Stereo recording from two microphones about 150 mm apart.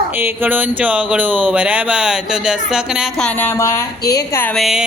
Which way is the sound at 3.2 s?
10° left (ahead or behind).